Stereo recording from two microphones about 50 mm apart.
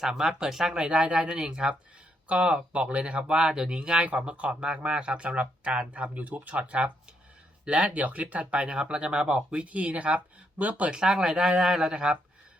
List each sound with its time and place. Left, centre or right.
0.0 s speech: centre
0.8 s speech: centre
10.9 s speech: centre